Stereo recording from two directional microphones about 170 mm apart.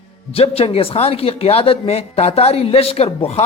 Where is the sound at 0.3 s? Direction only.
35° left (ahead or behind).